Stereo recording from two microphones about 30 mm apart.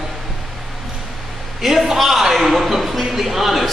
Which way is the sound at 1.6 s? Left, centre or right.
Centre.